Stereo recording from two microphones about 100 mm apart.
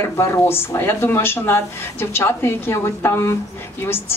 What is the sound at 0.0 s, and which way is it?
A woman's voice, 25° left (ahead or behind).